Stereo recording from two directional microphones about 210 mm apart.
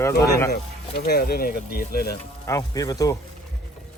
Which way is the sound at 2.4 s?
15° left (ahead or behind).